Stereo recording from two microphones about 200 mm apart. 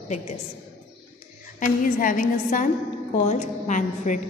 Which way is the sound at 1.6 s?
40° left (ahead or behind).